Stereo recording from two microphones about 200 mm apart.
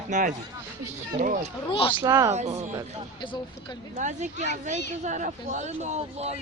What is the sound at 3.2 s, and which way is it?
Speech, 20° left (ahead or behind).